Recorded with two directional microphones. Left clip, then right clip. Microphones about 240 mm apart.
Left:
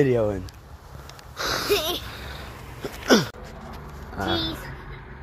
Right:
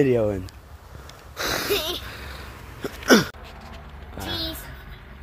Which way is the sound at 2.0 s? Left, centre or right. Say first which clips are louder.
Even; right.